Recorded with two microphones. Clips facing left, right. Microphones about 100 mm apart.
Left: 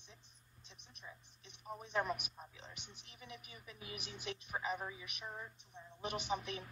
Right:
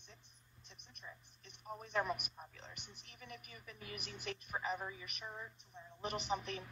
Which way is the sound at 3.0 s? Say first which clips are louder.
Even; 45° right (ahead or behind).